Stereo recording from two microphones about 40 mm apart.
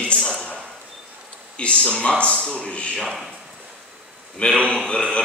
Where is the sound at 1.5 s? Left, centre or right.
Left.